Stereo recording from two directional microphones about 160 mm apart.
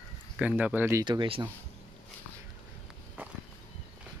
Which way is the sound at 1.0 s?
30° right (ahead or behind).